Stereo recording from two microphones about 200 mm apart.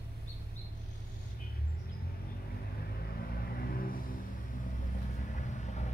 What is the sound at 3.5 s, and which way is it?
Vehicle, 45° left (ahead or behind).